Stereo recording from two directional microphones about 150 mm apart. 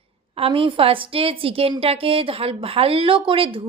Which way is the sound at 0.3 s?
40° right (ahead or behind).